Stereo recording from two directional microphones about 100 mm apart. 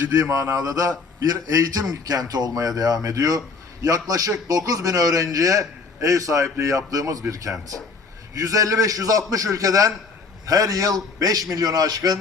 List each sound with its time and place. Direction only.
0.3 s a man's voice: 30° right (ahead or behind)